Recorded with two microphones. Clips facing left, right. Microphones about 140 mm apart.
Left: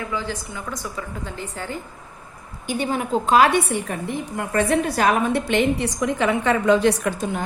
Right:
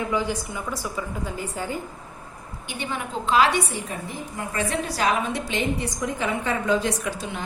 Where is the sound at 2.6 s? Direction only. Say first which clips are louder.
Left 8 dB; 40° left (ahead or behind).